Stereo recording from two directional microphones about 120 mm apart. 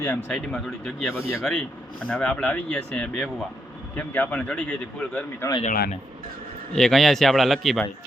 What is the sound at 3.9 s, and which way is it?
Speech, 15° left (ahead or behind).